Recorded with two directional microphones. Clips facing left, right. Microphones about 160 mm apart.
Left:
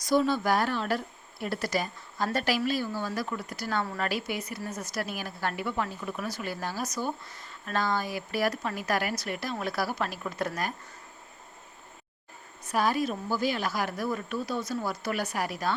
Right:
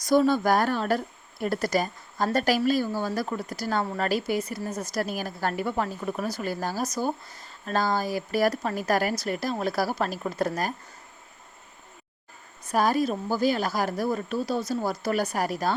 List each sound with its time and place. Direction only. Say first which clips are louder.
0.1 s a woman's voice: right 4 dB; 45° right (ahead or behind)
12.6 s a woman's voice: right 4 dB; 40° right (ahead or behind)